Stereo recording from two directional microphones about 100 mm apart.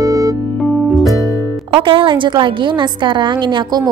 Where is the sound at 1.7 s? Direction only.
60° right (ahead or behind).